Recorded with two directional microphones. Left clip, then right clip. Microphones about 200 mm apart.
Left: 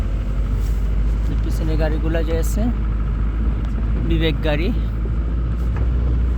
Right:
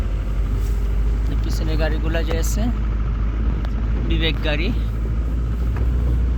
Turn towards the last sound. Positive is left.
turn(degrees=40)  # may be behind; listen again after turning